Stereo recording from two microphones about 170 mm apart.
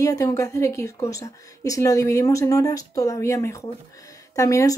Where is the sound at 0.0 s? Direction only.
20° left (ahead or behind).